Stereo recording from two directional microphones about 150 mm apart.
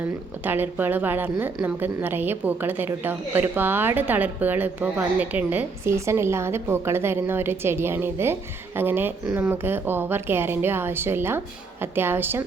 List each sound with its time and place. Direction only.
0.4 s a woman's voice: 15° right (ahead or behind)